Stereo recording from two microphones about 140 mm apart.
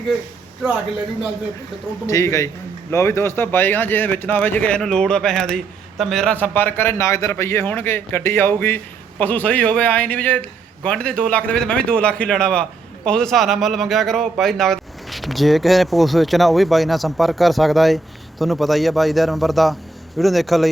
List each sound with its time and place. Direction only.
2.0 s a man's voice: 20° left (ahead or behind); by 20.7 s centre (ahead or behind)